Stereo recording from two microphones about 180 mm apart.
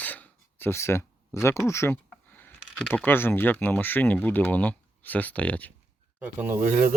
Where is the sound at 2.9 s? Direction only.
10° left (ahead or behind).